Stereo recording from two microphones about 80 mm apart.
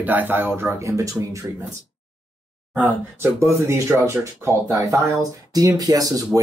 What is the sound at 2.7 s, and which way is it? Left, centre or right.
Speech, centre.